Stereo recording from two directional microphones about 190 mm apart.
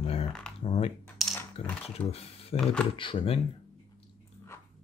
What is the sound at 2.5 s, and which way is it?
Speech, 5° left (ahead or behind).